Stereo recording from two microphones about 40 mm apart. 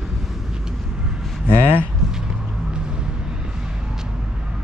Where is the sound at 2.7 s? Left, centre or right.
Right.